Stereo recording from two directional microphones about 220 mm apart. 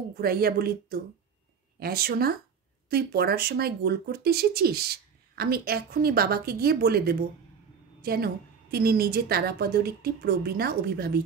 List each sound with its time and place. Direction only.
0.1 s speech: 45° right (ahead or behind)